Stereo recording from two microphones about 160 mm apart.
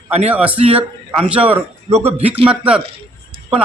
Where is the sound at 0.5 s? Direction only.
35° right (ahead or behind).